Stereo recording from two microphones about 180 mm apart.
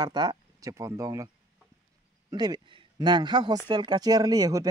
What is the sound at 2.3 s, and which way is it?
Speech, 25° right (ahead or behind).